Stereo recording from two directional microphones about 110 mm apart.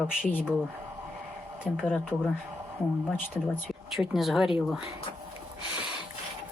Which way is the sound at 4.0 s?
Centre (ahead or behind).